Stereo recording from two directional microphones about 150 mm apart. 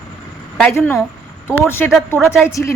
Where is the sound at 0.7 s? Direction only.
15° left (ahead or behind).